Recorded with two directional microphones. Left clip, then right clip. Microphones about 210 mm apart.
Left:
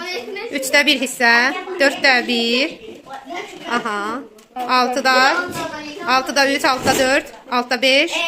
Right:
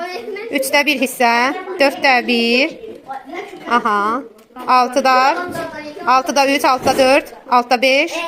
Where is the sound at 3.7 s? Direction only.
20° right (ahead or behind).